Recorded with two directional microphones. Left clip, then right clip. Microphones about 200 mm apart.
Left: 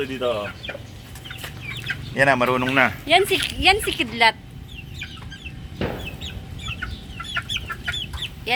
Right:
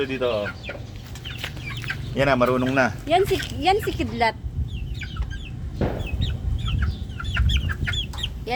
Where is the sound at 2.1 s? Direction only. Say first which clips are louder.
Left 2 dB; 20° left (ahead or behind).